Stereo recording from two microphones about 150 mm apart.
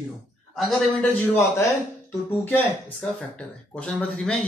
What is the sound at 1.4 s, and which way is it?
Speech, 20° left (ahead or behind).